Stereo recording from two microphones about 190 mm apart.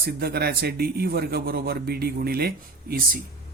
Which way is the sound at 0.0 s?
55° right (ahead or behind).